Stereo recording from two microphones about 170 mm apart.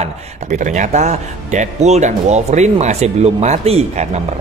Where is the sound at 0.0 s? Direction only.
45° right (ahead or behind).